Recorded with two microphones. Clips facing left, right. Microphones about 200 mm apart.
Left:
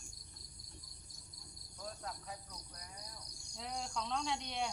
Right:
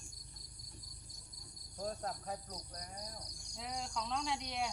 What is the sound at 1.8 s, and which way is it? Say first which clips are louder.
Speech: right 6 dB; 40° right (ahead or behind).